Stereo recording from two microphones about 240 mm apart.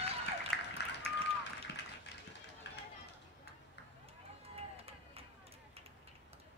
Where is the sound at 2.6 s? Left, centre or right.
Left.